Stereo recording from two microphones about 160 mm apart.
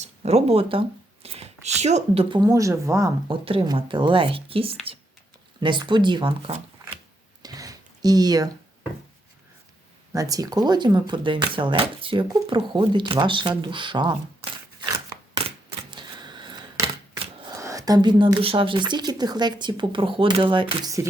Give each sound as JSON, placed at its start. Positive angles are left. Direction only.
{"t": 0.0, "sound": "speech", "side_deg": -40}
{"t": 2.3, "sound": "speech", "side_deg": -25}
{"t": 3.2, "sound": "speech", "side_deg": -35}
{"t": 7.4, "sound": "a sound", "side_deg": -20}
{"t": 10.1, "sound": "speech", "side_deg": -20}
{"t": 15.4, "sound": "typewriter", "side_deg": -30}
{"t": 17.6, "sound": "speech", "side_deg": -20}